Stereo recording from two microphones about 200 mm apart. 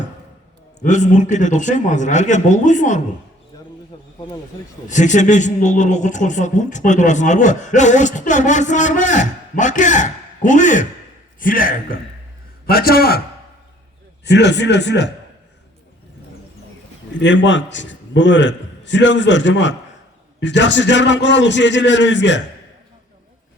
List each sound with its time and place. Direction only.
0.8 s a woman's voice: 35° left (ahead or behind)
3.5 s a sound: 20° left (ahead or behind)
4.9 s a woman's voice: 40° left (ahead or behind)
14.3 s a man's voice: 60° left (ahead or behind)
17.2 s a man's voice: 65° left (ahead or behind)